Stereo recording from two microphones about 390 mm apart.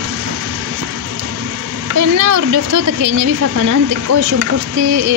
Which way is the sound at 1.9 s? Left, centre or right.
Right.